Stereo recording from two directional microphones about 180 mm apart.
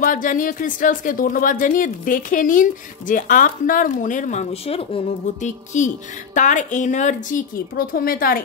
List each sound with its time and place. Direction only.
0.0 s speech: 50° left (ahead or behind)